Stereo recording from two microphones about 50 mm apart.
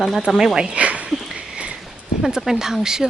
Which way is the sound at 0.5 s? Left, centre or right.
Right.